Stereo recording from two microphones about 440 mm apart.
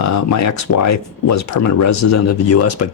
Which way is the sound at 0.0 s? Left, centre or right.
Left.